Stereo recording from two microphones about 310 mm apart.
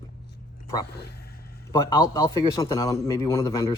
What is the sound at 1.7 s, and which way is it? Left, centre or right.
Speech, centre.